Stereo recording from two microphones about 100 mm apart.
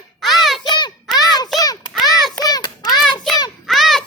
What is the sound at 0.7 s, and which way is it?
Hands, 50° left (ahead or behind).